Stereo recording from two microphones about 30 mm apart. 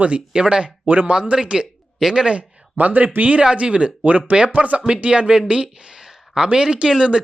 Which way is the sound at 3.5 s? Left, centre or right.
Right.